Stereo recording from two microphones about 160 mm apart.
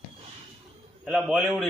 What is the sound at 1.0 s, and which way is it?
Speech, 5° right (ahead or behind).